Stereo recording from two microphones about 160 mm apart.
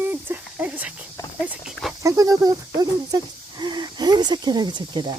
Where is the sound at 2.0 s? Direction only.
20° right (ahead or behind).